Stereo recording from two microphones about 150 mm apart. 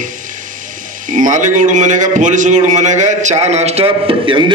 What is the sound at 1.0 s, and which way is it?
A man's voice, 60° right (ahead or behind).